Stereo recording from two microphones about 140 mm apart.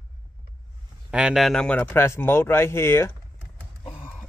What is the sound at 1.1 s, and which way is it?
Speech, 5° right (ahead or behind).